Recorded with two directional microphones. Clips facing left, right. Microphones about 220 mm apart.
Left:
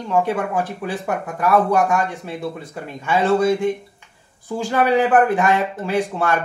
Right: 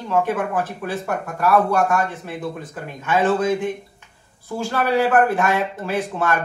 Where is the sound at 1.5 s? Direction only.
15° left (ahead or behind).